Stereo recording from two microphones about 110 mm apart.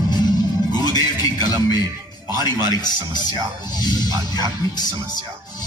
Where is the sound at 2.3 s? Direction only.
40° left (ahead or behind).